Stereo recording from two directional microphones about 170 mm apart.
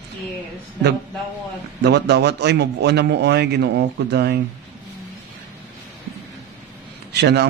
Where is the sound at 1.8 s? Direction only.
80° right.